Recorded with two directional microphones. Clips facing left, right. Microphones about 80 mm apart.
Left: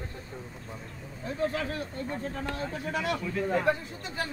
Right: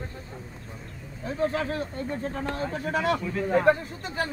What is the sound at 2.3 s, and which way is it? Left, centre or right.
Speech, right.